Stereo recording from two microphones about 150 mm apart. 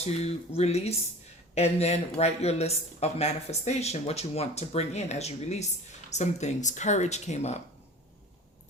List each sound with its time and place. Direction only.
0.0 s speech: 45° left (ahead or behind)